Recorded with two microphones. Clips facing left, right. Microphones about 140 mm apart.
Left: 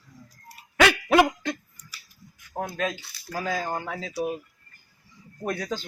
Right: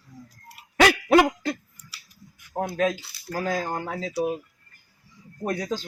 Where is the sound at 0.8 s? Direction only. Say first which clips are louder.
Right 2 dB; 35° right (ahead or behind).